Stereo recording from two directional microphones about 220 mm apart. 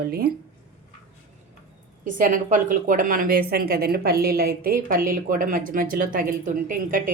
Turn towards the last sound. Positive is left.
turn(degrees=-40)  # may be behind; listen again after turning